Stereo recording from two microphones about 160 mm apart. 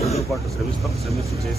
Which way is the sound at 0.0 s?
40° left (ahead or behind).